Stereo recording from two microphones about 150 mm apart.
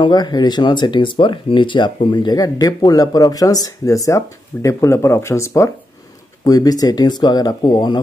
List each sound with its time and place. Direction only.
0.0 s speech: 30° left (ahead or behind)